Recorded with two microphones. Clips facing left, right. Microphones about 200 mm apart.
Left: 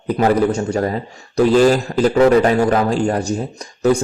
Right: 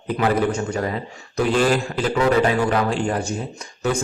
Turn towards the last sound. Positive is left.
turn(degrees=35)  # may be behind; listen again after turning